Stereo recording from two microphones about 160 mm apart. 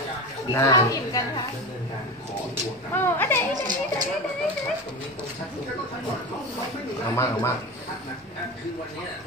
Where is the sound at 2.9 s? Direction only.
15° left (ahead or behind).